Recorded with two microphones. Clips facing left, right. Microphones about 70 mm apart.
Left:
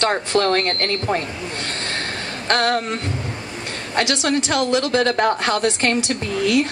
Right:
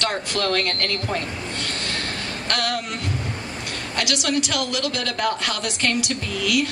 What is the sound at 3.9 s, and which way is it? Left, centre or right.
A woman's voice, left.